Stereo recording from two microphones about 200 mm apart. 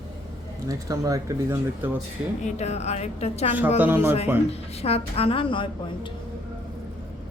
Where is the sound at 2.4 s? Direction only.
35° left (ahead or behind).